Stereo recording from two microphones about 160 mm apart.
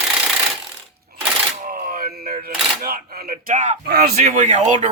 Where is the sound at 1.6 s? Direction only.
60° right (ahead or behind).